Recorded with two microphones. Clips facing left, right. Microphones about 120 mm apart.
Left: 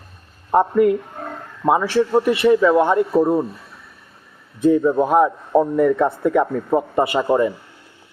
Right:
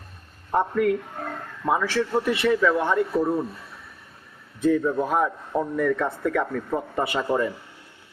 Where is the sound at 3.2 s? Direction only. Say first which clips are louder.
Left 6 dB; 30° left (ahead or behind).